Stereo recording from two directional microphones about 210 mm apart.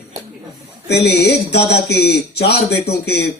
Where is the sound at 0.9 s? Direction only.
50° left (ahead or behind).